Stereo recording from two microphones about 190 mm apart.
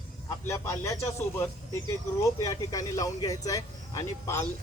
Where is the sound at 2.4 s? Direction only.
15° left (ahead or behind).